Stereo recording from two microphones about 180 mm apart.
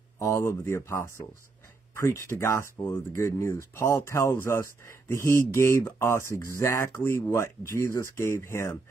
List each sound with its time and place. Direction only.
0.2 s speech: 15° left (ahead or behind)